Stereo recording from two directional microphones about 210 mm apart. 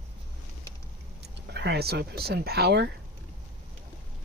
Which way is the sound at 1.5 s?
50° right (ahead or behind).